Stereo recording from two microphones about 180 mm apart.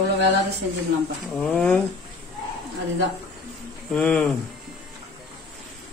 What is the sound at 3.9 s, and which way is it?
Speech, 5° left (ahead or behind).